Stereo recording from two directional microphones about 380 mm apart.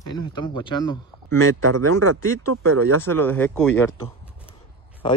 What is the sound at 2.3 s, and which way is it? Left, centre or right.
Speech, right.